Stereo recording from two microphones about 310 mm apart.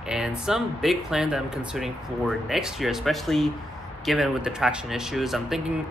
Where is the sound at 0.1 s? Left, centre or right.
Centre.